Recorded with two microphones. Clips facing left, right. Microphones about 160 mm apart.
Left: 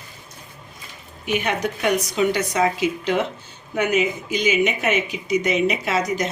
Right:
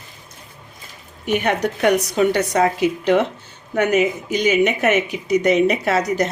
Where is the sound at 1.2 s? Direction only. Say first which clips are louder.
Right 4 dB; 55° right (ahead or behind).